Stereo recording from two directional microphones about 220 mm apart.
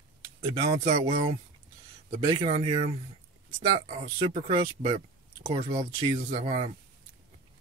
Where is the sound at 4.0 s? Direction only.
25° right (ahead or behind).